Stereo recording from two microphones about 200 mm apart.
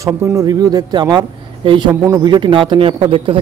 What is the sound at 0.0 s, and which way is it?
Speech, 15° right (ahead or behind).